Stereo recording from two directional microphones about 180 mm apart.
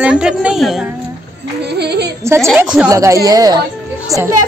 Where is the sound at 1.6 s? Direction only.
65° right (ahead or behind).